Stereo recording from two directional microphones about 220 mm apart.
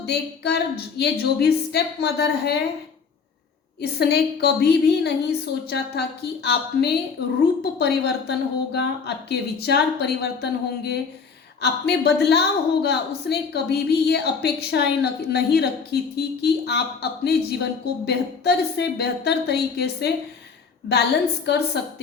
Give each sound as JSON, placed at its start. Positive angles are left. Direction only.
{"t": 0.0, "sound": "a woman's voice", "side_deg": 50}
{"t": 3.8, "sound": "a woman's voice", "side_deg": 45}
{"t": 21.4, "sound": "a woman's voice", "side_deg": 50}